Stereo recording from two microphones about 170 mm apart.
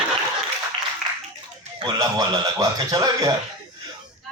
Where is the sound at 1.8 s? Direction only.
25° right (ahead or behind).